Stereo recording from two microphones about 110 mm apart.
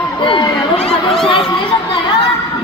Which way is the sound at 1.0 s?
Centre (ahead or behind).